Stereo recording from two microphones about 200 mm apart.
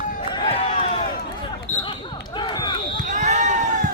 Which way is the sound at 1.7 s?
35° left (ahead or behind).